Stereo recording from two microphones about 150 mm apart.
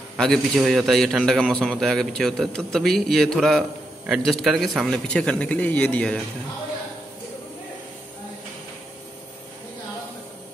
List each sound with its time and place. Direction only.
0.2 s a man's voice: centre (ahead or behind)